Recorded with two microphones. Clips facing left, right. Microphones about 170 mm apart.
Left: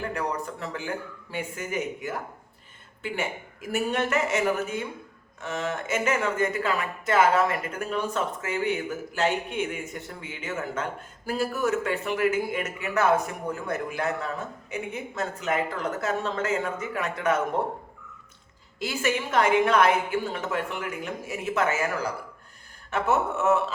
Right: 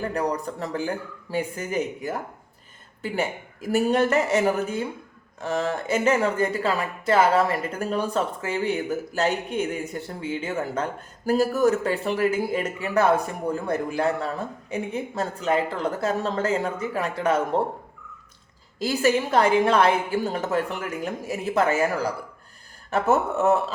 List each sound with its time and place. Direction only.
0.0 s speech: 35° right (ahead or behind)
18.8 s speech: 35° right (ahead or behind)